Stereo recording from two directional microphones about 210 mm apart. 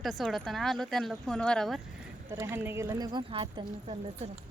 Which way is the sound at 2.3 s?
10° right (ahead or behind).